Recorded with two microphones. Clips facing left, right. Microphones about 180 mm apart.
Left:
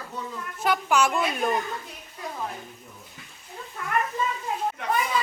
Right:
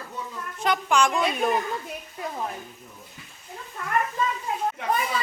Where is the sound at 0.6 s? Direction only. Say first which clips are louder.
Even; 5° left (ahead or behind).